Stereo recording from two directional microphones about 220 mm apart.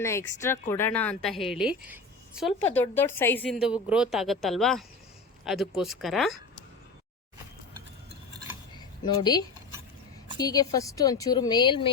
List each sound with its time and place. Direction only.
0.0 s a woman's voice: 10° left (ahead or behind)
2.7 s a woman's voice: 10° left (ahead or behind)
10.3 s a woman's voice: 15° left (ahead or behind)